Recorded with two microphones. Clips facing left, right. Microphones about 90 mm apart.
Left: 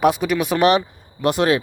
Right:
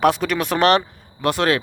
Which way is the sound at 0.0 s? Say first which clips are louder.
Left 1 dB; 10° left (ahead or behind).